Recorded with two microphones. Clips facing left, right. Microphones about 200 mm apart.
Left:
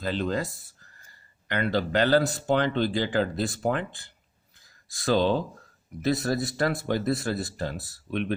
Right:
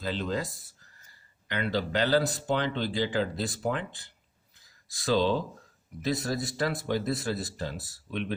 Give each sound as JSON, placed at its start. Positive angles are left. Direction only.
{"t": 0.0, "sound": "speech", "side_deg": 55}